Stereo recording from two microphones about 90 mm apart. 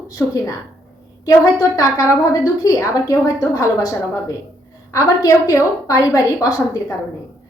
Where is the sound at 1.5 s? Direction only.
40° left (ahead or behind).